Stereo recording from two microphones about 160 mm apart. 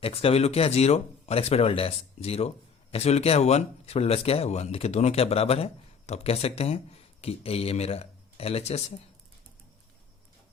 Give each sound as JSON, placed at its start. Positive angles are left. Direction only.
{"t": 0.0, "sound": "speech", "side_deg": 35}